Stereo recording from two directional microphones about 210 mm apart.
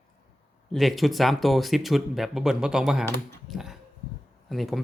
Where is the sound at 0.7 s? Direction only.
Centre (ahead or behind).